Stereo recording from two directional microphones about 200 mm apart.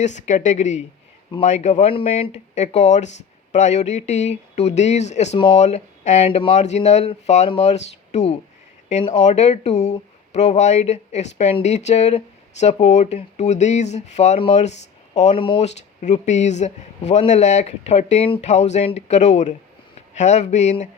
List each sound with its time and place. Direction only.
0.0 s speech: 35° left (ahead or behind)